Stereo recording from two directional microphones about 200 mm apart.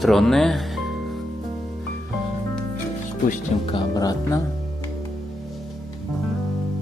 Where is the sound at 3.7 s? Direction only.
20° left (ahead or behind).